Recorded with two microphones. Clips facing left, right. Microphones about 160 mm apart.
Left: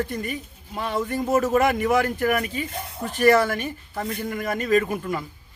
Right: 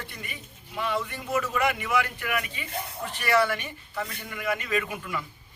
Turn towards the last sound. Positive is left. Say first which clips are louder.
# left 7 dB
turn(degrees=45)  # may be behind; listen again after turning